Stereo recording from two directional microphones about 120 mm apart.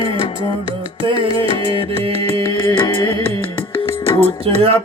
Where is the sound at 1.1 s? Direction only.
45° right (ahead or behind).